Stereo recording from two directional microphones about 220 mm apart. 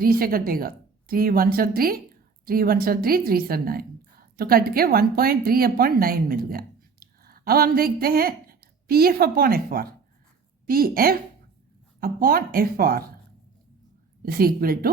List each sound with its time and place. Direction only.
0.0 s a woman's voice: 40° right (ahead or behind)
14.2 s a woman's voice: 40° right (ahead or behind)